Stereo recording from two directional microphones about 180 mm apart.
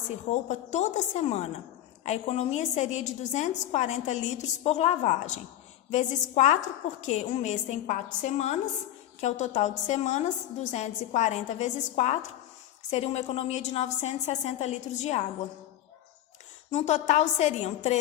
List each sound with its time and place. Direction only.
0.4 s a woman's voice: 40° left (ahead or behind)
16.7 s a woman's voice: 40° left (ahead or behind)